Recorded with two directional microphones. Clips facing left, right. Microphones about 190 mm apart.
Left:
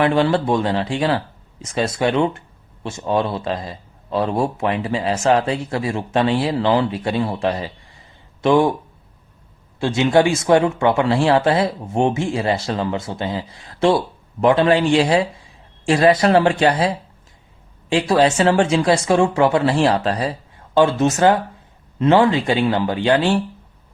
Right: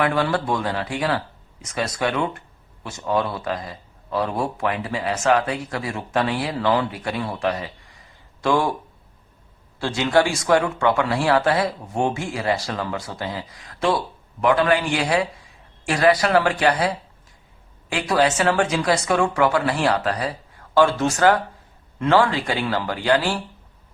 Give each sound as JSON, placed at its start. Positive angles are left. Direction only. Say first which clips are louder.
{"t": 0.0, "sound": "a man's voice", "louder": "left 5 dB", "side_deg": 25}
{"t": 9.8, "sound": "a man's voice", "louder": "left 4 dB", "side_deg": 20}